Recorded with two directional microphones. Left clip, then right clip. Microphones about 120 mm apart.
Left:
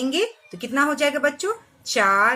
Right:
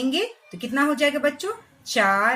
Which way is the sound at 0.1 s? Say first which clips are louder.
Left 2 dB; 45° left (ahead or behind).